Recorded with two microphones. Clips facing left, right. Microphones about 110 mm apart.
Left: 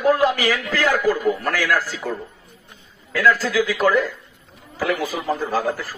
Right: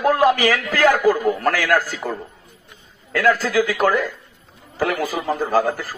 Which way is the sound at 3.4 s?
65° right (ahead or behind).